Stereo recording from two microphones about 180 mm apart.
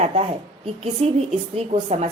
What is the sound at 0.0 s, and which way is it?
A woman's voice, 35° right (ahead or behind).